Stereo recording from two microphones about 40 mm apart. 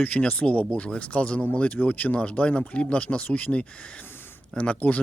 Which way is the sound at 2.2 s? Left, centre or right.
Left.